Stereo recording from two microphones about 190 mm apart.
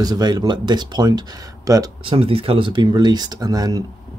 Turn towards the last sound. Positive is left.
turn(degrees=-20)  # may be behind; listen again after turning